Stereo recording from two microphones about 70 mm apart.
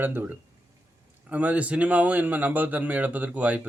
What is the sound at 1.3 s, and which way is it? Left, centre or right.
Speech, centre.